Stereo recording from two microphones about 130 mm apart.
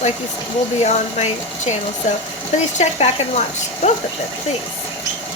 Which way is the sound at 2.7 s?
60° left (ahead or behind).